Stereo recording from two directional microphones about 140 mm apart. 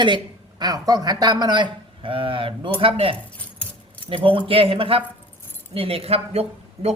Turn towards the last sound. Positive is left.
turn(degrees=-45)  # may be behind; listen again after turning